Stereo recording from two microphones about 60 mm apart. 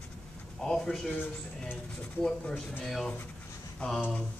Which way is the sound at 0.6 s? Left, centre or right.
Centre.